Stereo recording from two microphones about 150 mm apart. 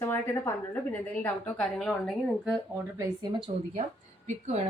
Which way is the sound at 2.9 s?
30° right (ahead or behind).